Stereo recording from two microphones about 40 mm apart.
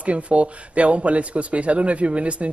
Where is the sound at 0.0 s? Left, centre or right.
Right.